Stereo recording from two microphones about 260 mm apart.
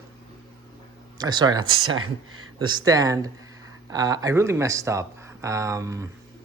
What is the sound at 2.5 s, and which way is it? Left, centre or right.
Speech, centre.